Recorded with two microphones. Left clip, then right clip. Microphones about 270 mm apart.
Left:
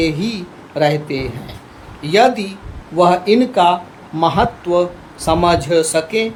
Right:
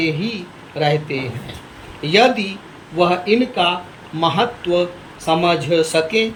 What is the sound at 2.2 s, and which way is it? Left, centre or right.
Speech, left.